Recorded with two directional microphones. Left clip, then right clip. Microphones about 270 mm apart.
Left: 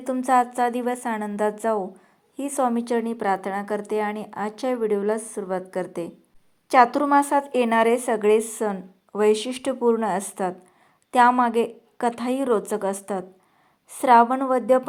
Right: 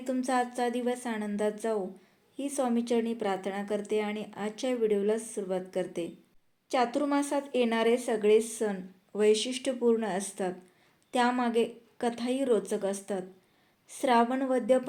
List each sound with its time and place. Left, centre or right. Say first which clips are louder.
0.0 s speech: left 9 dB; centre